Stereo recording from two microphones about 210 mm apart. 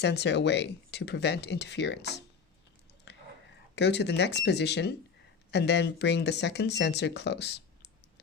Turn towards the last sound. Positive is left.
turn(degrees=50)  # may be behind; listen again after turning